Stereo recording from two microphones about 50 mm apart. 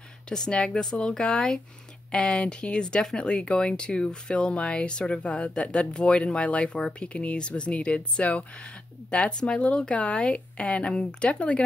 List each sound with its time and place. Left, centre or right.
0.3 s speech: centre